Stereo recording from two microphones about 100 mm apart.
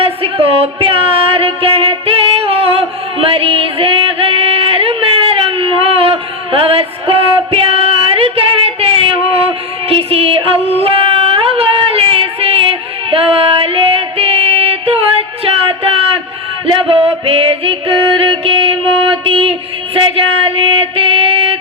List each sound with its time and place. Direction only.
0.0 s music: 70° right (ahead or behind)
9.9 s music: 75° right (ahead or behind)
13.1 s female singing: 70° right (ahead or behind)
15.4 s a sound: 70° right (ahead or behind)
16.9 s music: 70° right (ahead or behind)